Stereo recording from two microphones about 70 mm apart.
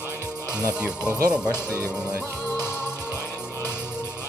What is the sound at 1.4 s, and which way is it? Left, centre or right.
Speech, left.